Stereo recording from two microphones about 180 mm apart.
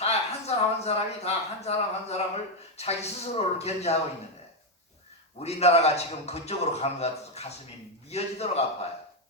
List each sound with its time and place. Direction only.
0.0 s a sound: 35° left (ahead or behind)
2.7 s a man's voice: 35° left (ahead or behind)
5.4 s a man's voice: 35° left (ahead or behind)